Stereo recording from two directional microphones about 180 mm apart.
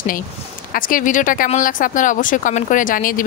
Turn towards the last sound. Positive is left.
turn(degrees=50)  # may be behind; listen again after turning